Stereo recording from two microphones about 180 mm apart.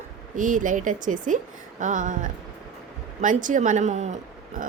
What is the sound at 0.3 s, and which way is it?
Speech, 45° right (ahead or behind).